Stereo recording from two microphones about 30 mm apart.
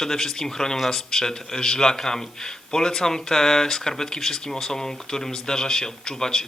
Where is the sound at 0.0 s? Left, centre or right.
Centre.